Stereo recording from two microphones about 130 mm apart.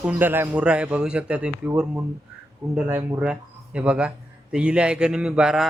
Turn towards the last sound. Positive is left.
turn(degrees=-5)  # may be behind; listen again after turning